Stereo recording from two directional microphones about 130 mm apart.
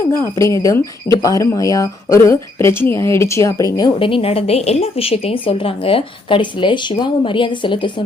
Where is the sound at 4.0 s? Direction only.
45° left (ahead or behind).